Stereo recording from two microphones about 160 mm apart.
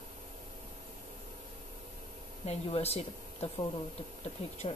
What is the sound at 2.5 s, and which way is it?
Speech, 40° left (ahead or behind).